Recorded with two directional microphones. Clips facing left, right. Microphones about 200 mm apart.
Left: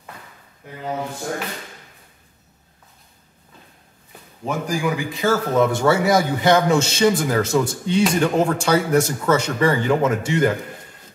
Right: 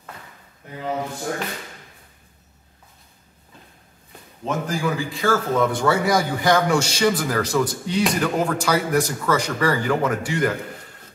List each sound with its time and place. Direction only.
4.5 s a man's voice: 15° left (ahead or behind)